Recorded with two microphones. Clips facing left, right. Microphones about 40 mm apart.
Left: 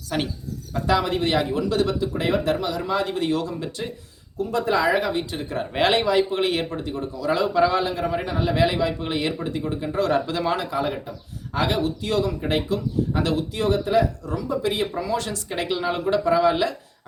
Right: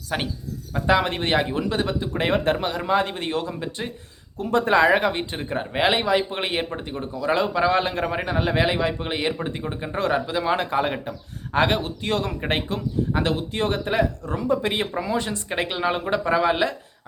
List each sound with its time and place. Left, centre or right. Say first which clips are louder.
0.1 s a man's voice: left 1 dB; centre
4.4 s speech: right 3 dB; right
5.7 s a man's voice: left 1 dB; centre; by 8.2 s right
8.2 s a man's voice: even; right
10.1 s speech: right 2 dB; centre
10.6 s speech: right 2 dB; right
15.0 s a man's voice: even; right